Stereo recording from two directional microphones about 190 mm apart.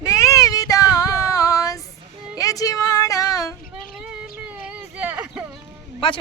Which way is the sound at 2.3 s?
20° left (ahead or behind).